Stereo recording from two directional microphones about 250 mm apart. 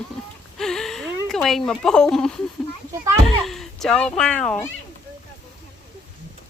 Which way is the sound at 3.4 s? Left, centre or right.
Centre.